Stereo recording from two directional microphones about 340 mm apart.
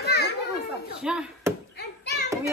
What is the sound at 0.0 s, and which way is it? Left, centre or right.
Children playing, left.